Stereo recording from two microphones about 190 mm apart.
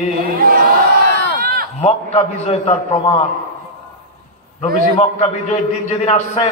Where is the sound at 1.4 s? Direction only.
50° right (ahead or behind).